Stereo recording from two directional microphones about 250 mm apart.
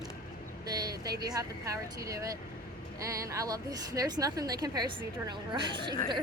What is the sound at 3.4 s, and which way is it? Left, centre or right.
A woman's voice, centre.